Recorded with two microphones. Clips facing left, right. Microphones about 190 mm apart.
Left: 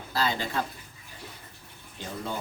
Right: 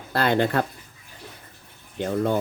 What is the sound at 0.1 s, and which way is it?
Speech, 60° right (ahead or behind).